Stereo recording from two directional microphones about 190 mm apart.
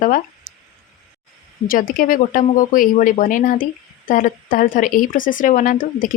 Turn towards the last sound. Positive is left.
turn(degrees=45)  # may be behind; listen again after turning